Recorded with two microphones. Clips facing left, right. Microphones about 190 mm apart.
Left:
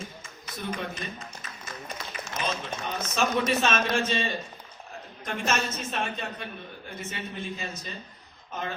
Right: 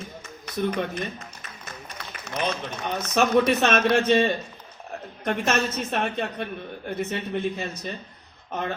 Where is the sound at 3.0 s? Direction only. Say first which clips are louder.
Right 7 dB; 60° right (ahead or behind).